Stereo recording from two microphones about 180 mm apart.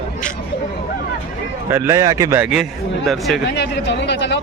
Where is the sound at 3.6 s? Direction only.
75° left (ahead or behind).